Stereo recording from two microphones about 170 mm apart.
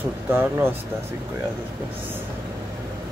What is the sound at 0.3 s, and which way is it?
Speech, 10° right (ahead or behind).